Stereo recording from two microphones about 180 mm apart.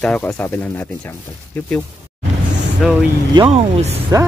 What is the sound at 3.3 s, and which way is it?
Speech, 35° right (ahead or behind).